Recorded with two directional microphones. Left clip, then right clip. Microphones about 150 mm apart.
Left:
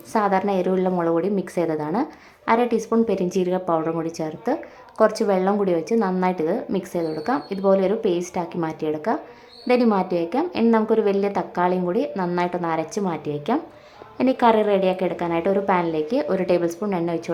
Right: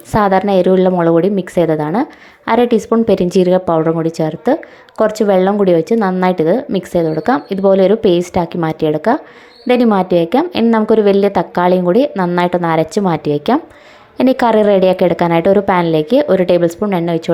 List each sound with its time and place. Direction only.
0.1 s a woman's voice: 35° right (ahead or behind)